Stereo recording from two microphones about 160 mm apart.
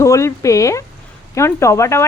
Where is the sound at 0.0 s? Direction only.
20° left (ahead or behind).